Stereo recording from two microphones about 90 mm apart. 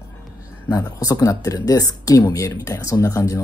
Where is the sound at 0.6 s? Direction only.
40° left (ahead or behind).